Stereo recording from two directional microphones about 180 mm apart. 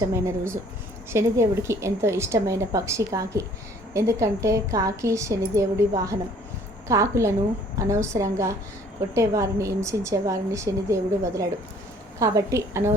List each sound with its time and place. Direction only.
0.0 s a woman's voice: 15° right (ahead or behind)